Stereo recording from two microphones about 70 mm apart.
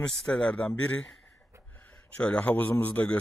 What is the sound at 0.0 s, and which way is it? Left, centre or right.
Speech, centre.